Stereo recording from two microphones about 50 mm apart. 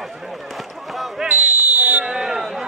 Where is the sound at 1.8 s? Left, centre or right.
Right.